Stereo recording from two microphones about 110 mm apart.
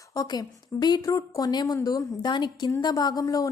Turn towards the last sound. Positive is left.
turn(degrees=35)  # may be behind; listen again after turning